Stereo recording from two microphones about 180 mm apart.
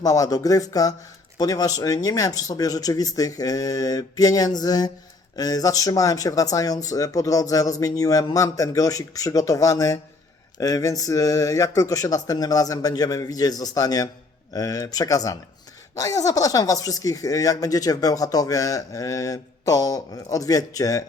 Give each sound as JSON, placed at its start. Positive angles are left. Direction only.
{"t": 0.0, "sound": "speech", "side_deg": 20}